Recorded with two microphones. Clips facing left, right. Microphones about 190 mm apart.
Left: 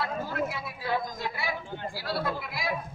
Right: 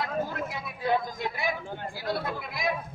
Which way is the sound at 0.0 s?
20° right (ahead or behind).